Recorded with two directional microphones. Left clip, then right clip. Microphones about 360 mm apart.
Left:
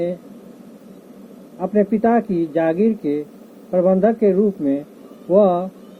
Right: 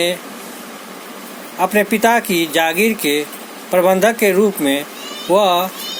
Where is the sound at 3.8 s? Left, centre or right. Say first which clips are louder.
Right 3 dB; right.